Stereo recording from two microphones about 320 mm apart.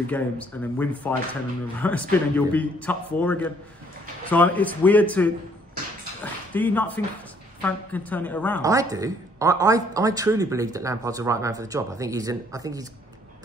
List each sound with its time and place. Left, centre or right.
0.0 s a man's voice: centre
6.5 s a man's voice: centre
8.6 s a woman's voice: centre